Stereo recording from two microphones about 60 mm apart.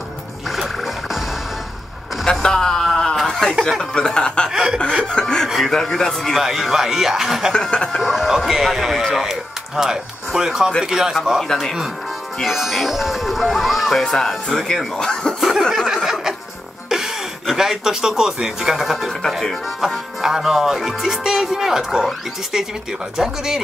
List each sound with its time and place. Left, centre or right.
0.5 s music: centre
2.4 s a sound: centre
3.9 s speech: centre
4.5 s speech: centre
5.0 s speech: centre
6.4 s speech: centre
7.5 s speech: centre
8.0 s speech: centre
11.4 s speech: centre
12.4 s speech: centre
15.7 s a sound: centre
16.9 s speech: centre
20.2 s speech: centre